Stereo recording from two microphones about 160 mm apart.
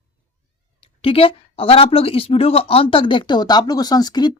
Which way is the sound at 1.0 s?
35° left (ahead or behind).